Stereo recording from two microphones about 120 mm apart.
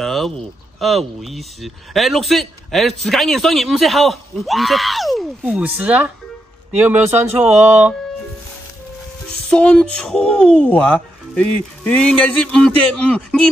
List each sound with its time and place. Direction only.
0.0 s speech: centre (ahead or behind)
5.4 s speech: 10° right (ahead or behind)
9.5 s speech: 5° left (ahead or behind)